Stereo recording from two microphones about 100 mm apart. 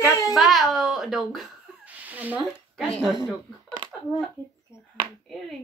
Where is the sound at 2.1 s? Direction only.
15° right (ahead or behind).